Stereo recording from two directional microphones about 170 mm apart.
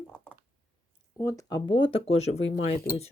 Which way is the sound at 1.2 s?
15° left (ahead or behind).